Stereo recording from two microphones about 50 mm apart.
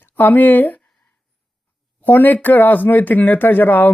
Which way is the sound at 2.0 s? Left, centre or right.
Left.